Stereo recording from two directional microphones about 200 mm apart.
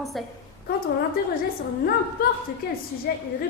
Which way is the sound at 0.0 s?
Centre (ahead or behind).